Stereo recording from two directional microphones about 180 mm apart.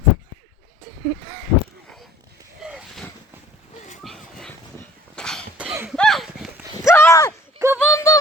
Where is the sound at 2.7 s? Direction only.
5° right (ahead or behind).